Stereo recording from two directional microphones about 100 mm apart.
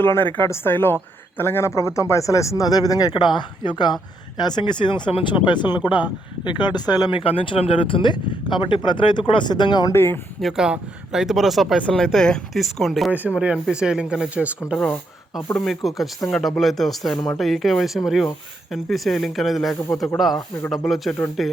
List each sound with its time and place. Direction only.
0.0 s a woman's voice: 20° left (ahead or behind); by 7.2 s 40° left (ahead or behind)
7.2 s speech: 65° left (ahead or behind); by 9.9 s 45° left (ahead or behind)
9.9 s a woman's voice: 25° left (ahead or behind)
10.4 s speech: 5° right (ahead or behind)
13.1 s speech: 15° right (ahead or behind)
15.5 s speech: centre (ahead or behind)